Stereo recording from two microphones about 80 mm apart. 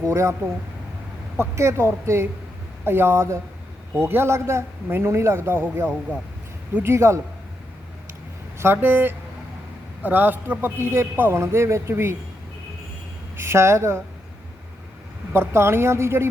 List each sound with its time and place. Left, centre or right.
0.0 s speech: right
1.4 s speech: right
8.5 s a man's voice: right
13.3 s speech: right
15.3 s speech: right